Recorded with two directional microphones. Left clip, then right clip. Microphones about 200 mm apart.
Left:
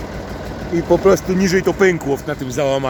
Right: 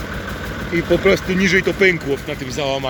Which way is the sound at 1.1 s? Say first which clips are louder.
Even; 15° left (ahead or behind).